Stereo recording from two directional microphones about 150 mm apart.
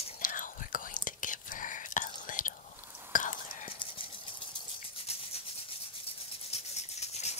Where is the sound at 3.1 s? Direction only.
60° left (ahead or behind).